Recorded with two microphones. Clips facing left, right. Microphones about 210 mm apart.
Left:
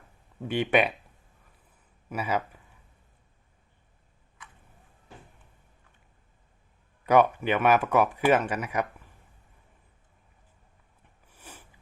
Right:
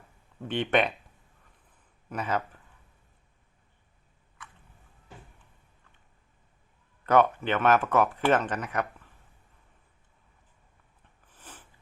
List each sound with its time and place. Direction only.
0.4 s speech: 10° left (ahead or behind)
2.0 s speech: 10° left (ahead or behind)
7.0 s speech: 10° left (ahead or behind)
11.3 s a sound: 10° left (ahead or behind)